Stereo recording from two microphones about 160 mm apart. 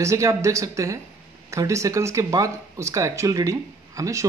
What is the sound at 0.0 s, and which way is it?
Speech, 20° right (ahead or behind).